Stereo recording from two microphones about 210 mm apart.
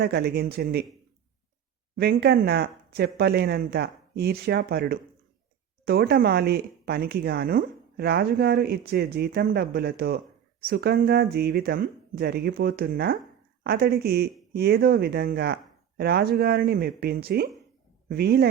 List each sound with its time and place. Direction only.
0.0 s speech: 50° right (ahead or behind)
2.0 s speech: 50° right (ahead or behind)